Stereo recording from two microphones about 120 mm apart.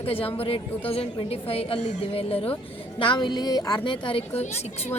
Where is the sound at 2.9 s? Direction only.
45° left (ahead or behind).